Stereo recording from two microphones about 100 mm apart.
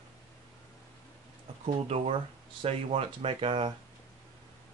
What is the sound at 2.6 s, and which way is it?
Speech, 70° right (ahead or behind).